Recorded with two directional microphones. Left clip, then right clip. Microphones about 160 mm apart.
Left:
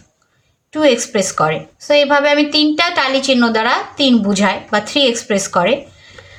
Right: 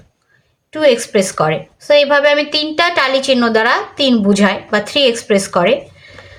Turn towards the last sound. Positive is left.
turn(degrees=-20)  # may be behind; listen again after turning